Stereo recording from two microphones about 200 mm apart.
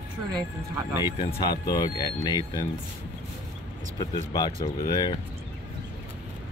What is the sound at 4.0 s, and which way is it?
Speech, 20° left (ahead or behind).